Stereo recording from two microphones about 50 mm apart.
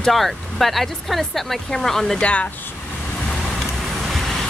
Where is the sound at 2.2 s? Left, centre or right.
Left.